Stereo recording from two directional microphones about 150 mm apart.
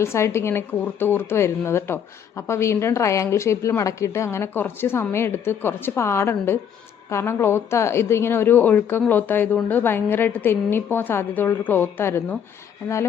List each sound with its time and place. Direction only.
0.0 s a woman's voice: 20° left (ahead or behind)